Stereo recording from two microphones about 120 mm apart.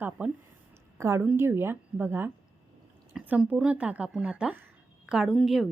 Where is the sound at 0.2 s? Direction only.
15° right (ahead or behind).